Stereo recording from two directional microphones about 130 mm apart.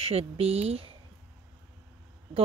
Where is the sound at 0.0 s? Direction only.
50° right (ahead or behind).